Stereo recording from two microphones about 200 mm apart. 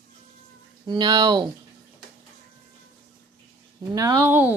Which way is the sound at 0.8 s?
20° right (ahead or behind).